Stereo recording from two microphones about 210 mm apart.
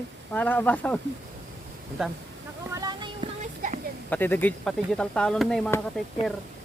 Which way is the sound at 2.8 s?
20° right (ahead or behind).